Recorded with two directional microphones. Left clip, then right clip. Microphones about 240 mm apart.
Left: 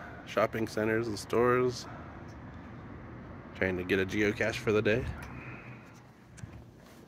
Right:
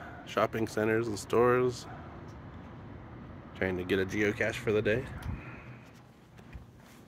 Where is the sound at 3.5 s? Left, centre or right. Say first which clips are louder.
Left 1 dB; centre.